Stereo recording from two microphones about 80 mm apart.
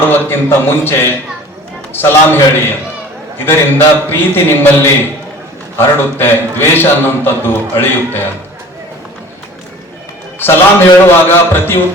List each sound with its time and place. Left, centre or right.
0.1 s a man's voice: left
10.4 s a man's voice: left